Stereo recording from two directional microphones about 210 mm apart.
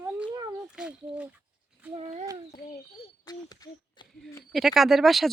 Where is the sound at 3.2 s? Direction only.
20° left (ahead or behind).